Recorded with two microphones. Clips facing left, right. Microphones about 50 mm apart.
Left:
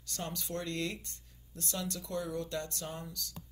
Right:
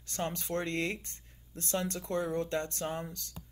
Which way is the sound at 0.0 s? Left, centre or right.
Right.